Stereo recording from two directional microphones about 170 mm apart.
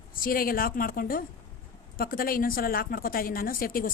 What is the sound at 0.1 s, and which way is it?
A woman's voice, 55° left (ahead or behind).